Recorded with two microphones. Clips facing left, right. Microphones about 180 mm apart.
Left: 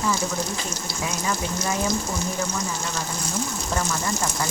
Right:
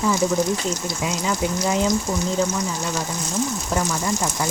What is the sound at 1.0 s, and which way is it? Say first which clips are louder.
Speech: right 4 dB; 20° right (ahead or behind).